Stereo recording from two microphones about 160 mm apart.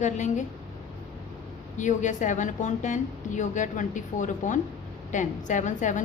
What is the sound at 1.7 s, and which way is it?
A woman's voice, 50° left (ahead or behind).